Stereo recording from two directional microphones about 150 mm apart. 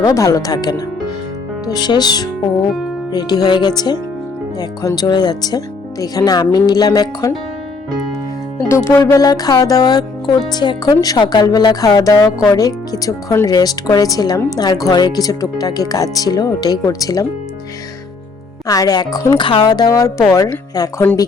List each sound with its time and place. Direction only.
0.0 s speech: 25° left (ahead or behind)
8.5 s speech: 20° left (ahead or behind)
18.7 s speech: 25° left (ahead or behind)